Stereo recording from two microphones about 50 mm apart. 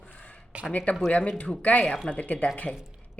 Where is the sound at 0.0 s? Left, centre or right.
Left.